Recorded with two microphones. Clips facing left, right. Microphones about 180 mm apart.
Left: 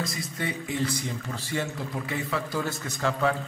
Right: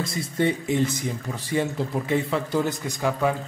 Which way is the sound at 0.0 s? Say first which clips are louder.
Right 8 dB; 25° right (ahead or behind).